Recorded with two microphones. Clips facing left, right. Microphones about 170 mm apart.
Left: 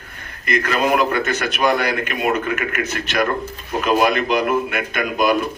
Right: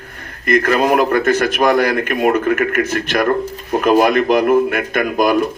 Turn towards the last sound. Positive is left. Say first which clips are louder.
# right 3 dB
turn(degrees=-50)  # may be behind; listen again after turning